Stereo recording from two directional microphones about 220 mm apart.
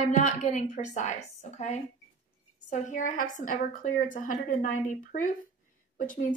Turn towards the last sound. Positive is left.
turn(degrees=35)  # may be behind; listen again after turning